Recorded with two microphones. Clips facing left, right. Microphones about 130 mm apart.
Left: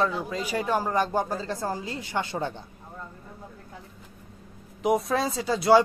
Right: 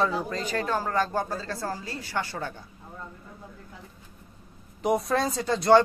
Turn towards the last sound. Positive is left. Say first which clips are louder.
# even
turn(degrees=5)  # may be behind; listen again after turning